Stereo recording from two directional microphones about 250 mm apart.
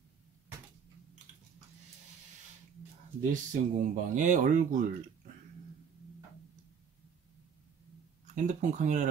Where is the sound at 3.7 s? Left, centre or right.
Right.